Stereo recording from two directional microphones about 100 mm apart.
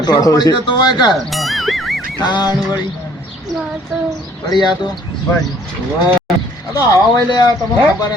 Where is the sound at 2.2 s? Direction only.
45° left (ahead or behind).